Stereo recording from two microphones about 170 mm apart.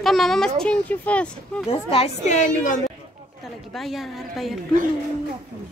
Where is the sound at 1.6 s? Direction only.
35° left (ahead or behind).